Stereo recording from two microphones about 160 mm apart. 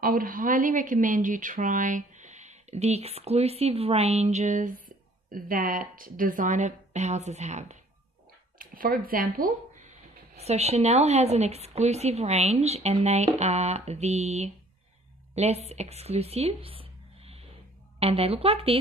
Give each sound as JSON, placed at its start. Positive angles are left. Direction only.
{"t": 0.0, "sound": "a woman's voice", "side_deg": -60}
{"t": 8.5, "sound": "speech", "side_deg": -60}
{"t": 10.3, "sound": "a woman's voice", "side_deg": -40}